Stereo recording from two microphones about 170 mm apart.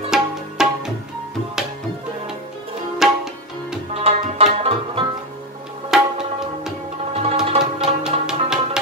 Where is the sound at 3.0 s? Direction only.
Centre (ahead or behind).